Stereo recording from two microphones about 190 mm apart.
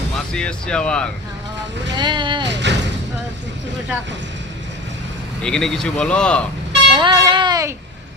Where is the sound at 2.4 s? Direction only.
65° right (ahead or behind).